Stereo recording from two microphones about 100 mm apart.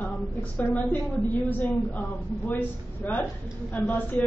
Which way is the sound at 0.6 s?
10° left (ahead or behind).